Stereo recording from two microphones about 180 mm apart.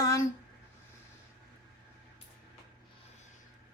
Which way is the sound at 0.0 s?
15° left (ahead or behind).